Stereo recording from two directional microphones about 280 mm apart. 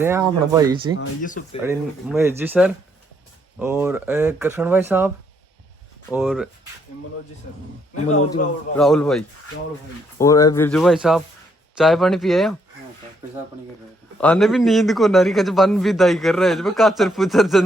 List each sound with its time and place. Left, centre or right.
0.0 s a man's voice: centre
7.9 s a man's voice: left
8.7 s a man's voice: centre
14.2 s a man's voice: centre